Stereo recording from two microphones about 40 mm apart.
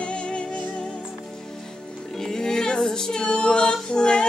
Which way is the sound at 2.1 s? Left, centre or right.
Centre.